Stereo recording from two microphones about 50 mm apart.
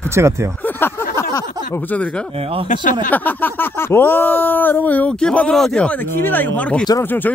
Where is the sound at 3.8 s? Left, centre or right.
Left.